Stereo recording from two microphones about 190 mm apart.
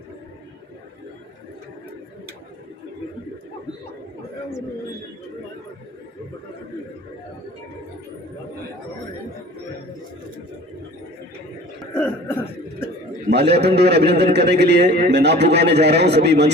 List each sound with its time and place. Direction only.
11.8 s throat clearing: 10° left (ahead or behind)
13.3 s a man's voice: 60° right (ahead or behind)